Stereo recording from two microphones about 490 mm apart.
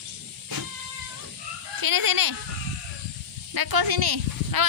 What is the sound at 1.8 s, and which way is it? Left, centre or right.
Speech, right.